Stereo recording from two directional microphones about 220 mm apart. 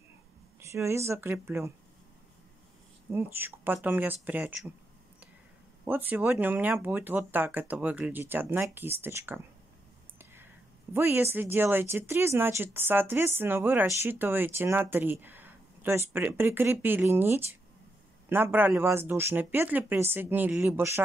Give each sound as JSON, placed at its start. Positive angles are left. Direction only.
{"t": 0.6, "sound": "speech", "side_deg": -10}
{"t": 3.1, "sound": "speech", "side_deg": -10}
{"t": 5.9, "sound": "speech", "side_deg": -10}